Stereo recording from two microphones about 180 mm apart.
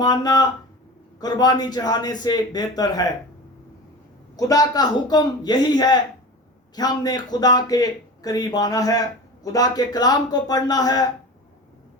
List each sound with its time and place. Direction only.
0.0 s a man's voice: 20° left (ahead or behind)
4.4 s a man's voice: 20° left (ahead or behind)